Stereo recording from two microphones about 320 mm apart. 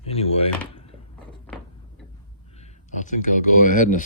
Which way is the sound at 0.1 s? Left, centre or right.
Centre.